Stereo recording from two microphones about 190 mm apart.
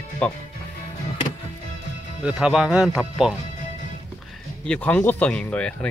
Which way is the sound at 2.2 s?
5° right (ahead or behind).